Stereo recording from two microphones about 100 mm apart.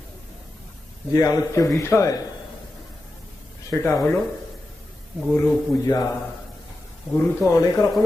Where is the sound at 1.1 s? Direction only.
40° left (ahead or behind).